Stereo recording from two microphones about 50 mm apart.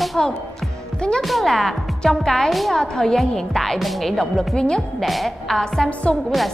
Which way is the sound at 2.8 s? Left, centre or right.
Centre.